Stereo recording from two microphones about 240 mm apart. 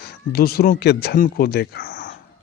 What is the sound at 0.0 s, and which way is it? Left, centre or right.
A man's voice, left.